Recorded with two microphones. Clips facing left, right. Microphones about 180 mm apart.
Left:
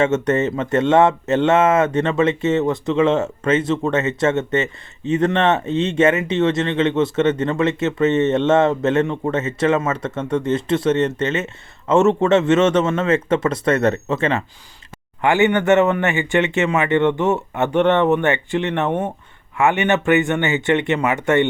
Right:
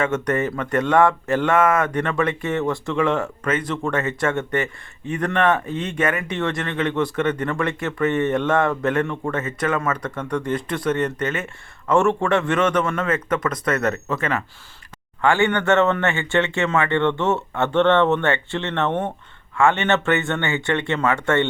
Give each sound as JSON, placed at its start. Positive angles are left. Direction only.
{"t": 0.0, "sound": "speech", "side_deg": 25}